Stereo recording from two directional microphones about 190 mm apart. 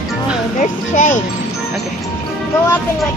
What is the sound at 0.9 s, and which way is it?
Speech, 40° left (ahead or behind).